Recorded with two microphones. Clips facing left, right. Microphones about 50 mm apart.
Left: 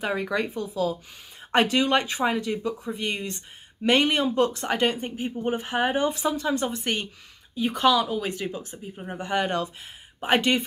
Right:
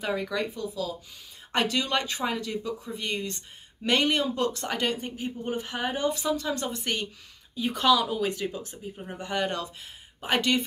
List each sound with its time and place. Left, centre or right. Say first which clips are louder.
0.0 s speech: left 3 dB; left